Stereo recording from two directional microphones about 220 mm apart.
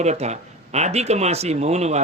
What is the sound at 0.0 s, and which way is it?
Speech, 30° right (ahead or behind).